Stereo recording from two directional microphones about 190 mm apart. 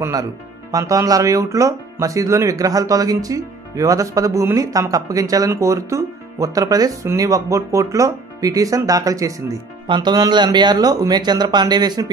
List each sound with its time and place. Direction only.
0.0 s speech: 20° right (ahead or behind)